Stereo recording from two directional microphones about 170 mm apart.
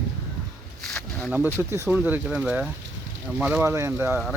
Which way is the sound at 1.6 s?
15° right (ahead or behind).